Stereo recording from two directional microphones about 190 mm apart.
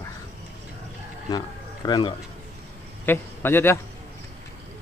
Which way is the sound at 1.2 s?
20° left (ahead or behind).